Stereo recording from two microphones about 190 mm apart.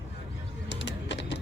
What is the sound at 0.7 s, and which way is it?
Music, 70° left (ahead or behind).